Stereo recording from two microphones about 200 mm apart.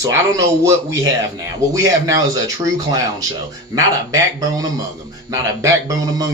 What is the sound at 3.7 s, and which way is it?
Speech, 15° right (ahead or behind).